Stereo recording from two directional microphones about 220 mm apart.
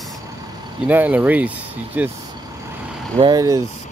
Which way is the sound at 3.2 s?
15° right (ahead or behind).